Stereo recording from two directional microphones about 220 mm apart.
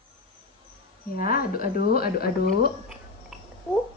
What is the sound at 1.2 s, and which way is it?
Speech, 40° left (ahead or behind).